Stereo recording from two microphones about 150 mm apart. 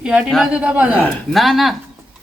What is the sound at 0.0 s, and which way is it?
Speech, 5° right (ahead or behind).